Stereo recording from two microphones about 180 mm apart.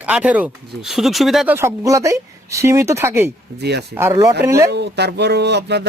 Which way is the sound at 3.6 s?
65° right (ahead or behind).